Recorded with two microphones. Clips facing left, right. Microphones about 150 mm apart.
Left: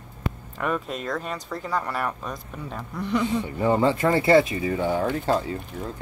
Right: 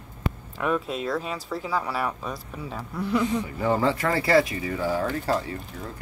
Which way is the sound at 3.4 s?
30° left (ahead or behind).